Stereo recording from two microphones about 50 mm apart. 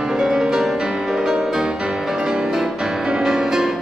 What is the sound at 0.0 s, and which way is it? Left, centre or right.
Music, centre.